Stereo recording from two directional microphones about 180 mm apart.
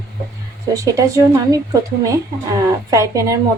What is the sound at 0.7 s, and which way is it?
A woman's voice, 20° right (ahead or behind).